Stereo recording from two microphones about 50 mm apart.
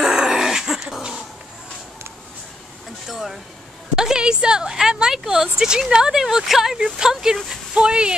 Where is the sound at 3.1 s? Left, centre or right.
Centre.